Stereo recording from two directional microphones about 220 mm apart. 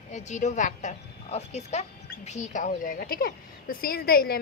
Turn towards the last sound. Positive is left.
turn(degrees=45)  # may be behind; listen again after turning